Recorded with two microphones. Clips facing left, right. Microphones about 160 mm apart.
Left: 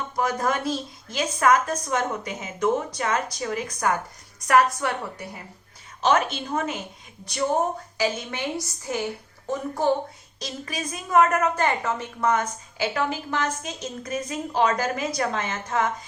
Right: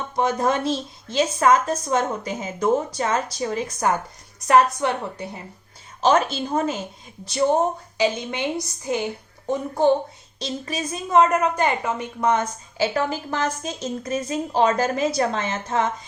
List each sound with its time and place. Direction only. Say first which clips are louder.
0.2 s a woman's voice: right 4 dB; 25° right (ahead or behind)
7.9 s a woman's voice: right 4 dB; 20° right (ahead or behind)